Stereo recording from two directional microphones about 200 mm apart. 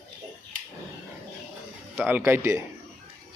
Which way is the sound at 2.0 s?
10° right (ahead or behind).